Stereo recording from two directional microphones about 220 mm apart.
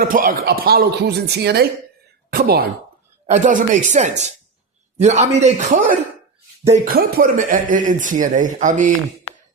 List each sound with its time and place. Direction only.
0.0 s speech: 40° right (ahead or behind)